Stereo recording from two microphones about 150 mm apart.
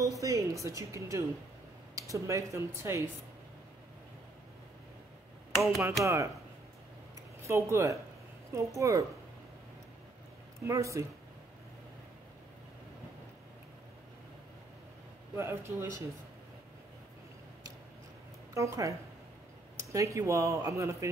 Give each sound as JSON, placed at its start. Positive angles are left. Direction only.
{"t": 0.0, "sound": "a woman's voice", "side_deg": -20}
{"t": 6.0, "sound": "speech", "side_deg": -20}
{"t": 7.4, "sound": "speech", "side_deg": -20}
{"t": 10.6, "sound": "speech", "side_deg": -20}
{"t": 15.3, "sound": "speech", "side_deg": -20}
{"t": 18.5, "sound": "speech", "side_deg": -20}